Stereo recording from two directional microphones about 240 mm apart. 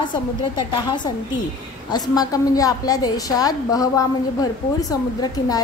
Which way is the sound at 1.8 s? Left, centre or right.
Centre.